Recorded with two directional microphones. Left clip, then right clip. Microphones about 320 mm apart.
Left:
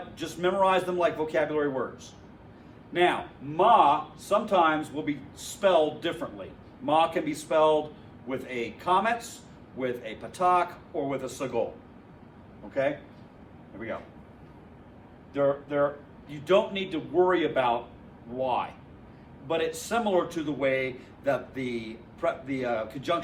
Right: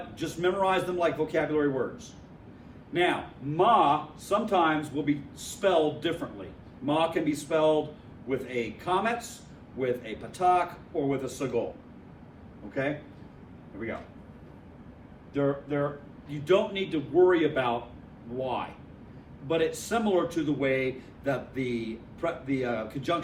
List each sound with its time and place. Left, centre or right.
0.2 s a man's voice: centre
2.9 s a man's voice: centre
15.3 s a man's voice: centre